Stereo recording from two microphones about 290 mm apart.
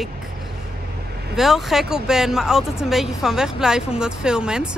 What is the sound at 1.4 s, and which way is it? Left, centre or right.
Speech, centre.